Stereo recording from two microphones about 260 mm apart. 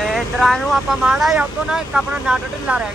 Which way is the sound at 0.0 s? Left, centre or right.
Centre.